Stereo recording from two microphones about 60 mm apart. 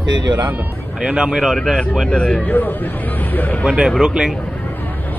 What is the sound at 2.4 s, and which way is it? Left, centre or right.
Speech, left.